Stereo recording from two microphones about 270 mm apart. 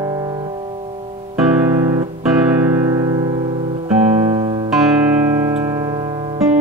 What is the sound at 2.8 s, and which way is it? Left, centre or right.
Music, centre.